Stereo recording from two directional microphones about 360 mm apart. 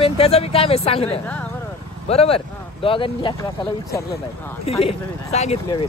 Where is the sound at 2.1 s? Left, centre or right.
Centre.